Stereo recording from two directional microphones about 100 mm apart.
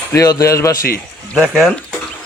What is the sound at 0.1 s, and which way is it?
Speech, 35° left (ahead or behind).